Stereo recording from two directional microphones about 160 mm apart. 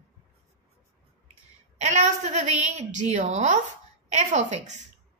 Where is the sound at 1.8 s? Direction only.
45° right (ahead or behind).